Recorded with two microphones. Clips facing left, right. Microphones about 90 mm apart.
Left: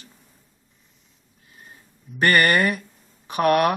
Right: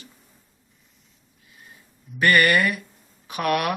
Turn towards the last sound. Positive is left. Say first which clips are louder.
# left 5 dB
turn(degrees=40)  # may be behind; listen again after turning